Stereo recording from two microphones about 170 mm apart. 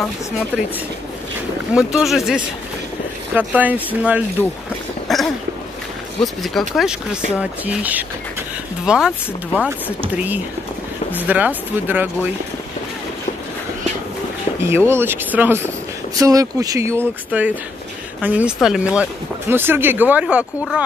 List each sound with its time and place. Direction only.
1.8 s speech: centre (ahead or behind)
5.0 s a sound: centre (ahead or behind)
6.2 s speech: centre (ahead or behind)
14.6 s speech: 15° right (ahead or behind)